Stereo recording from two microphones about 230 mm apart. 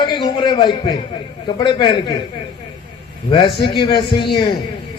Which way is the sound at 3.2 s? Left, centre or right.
Centre.